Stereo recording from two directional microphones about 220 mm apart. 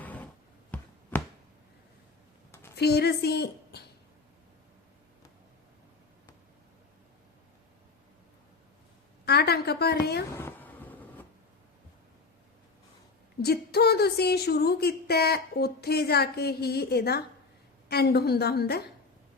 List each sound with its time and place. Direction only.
0.0 s a sound: 5° left (ahead or behind)
2.5 s a sound: 10° left (ahead or behind)
2.7 s a woman's voice: 45° left (ahead or behind)
9.2 s a woman's voice: 45° left (ahead or behind)
10.3 s vehicle: 10° left (ahead or behind)
13.4 s speech: 45° left (ahead or behind)